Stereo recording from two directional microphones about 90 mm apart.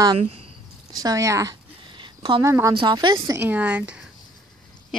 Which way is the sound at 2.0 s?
65° right (ahead or behind).